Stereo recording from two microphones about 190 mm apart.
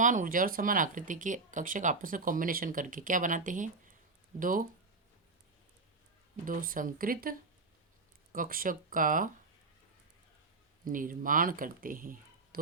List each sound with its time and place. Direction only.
0.0 s speech: 45° right (ahead or behind)
6.4 s speech: 45° right (ahead or behind)
10.8 s speech: 45° right (ahead or behind)